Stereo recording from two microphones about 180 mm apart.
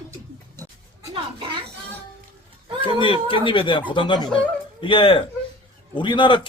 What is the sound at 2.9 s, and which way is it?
A man's voice, 30° left (ahead or behind).